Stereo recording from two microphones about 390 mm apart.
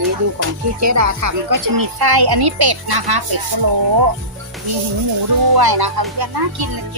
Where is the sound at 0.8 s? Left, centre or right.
Right.